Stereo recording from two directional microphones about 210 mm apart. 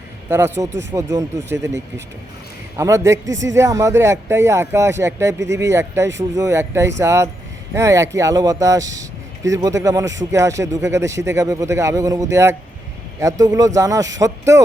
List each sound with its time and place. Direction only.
0.3 s speech: 10° right (ahead or behind)
3.2 s speech: 60° right (ahead or behind)
3.5 s speech: 15° right (ahead or behind)